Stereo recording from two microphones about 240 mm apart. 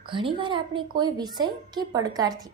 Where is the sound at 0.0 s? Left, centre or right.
Right.